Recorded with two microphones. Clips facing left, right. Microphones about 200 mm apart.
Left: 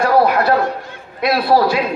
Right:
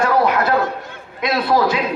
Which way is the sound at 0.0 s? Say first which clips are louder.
Left 3 dB; 35° left (ahead or behind).